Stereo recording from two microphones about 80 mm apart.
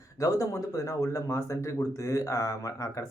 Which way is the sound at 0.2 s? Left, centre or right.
Left.